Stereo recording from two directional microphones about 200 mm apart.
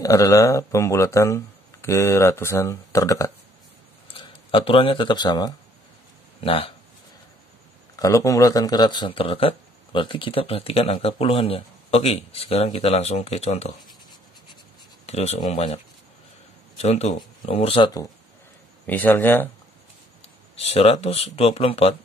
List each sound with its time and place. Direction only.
0.0 s speech: 15° left (ahead or behind)
7.9 s speech: 15° left (ahead or behind); by 13.7 s 35° left (ahead or behind)
15.0 s speech: 30° left (ahead or behind)
18.9 s speech: 10° left (ahead or behind)
20.5 s speech: 30° left (ahead or behind)